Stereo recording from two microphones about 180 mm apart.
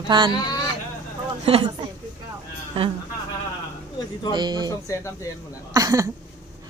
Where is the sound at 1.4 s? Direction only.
30° right (ahead or behind).